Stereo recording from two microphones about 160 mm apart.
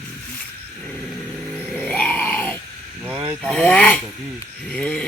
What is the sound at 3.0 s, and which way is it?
Vehicle, 10° right (ahead or behind).